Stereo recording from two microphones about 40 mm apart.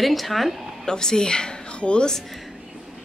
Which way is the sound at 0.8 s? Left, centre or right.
Centre.